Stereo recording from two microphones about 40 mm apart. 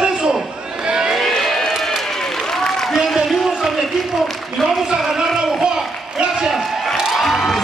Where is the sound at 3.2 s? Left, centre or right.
Centre.